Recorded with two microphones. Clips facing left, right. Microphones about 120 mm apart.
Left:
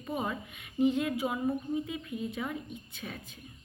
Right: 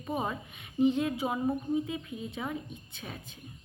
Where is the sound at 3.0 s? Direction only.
20° right (ahead or behind).